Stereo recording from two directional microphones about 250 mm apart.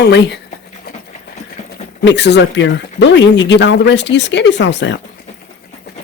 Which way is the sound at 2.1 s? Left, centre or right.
Left.